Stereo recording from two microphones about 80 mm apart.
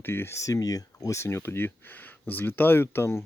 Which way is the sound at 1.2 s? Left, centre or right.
Left.